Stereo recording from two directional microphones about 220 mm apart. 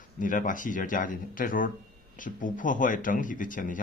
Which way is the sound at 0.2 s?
35° left (ahead or behind).